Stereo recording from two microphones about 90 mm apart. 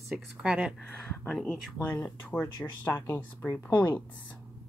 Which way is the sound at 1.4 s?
20° left (ahead or behind).